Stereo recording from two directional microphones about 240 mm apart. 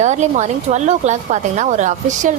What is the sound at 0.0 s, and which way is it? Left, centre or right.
A woman's voice, right.